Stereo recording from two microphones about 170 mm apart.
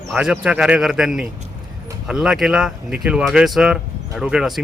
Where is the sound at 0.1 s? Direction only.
5° right (ahead or behind).